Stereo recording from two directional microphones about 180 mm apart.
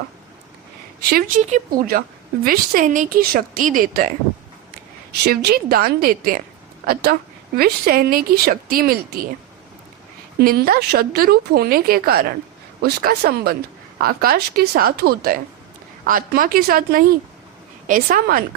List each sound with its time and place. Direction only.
1.4 s a woman's voice: 40° right (ahead or behind)
5.1 s speech: 65° right (ahead or behind)
10.4 s a woman's voice: 55° right (ahead or behind)